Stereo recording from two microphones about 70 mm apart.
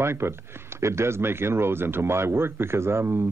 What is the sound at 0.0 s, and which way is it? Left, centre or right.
Speech, right.